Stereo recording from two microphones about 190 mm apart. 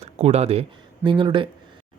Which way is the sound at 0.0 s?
35° right (ahead or behind).